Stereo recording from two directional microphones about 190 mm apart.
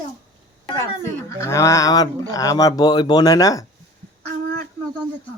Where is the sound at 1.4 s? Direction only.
15° left (ahead or behind).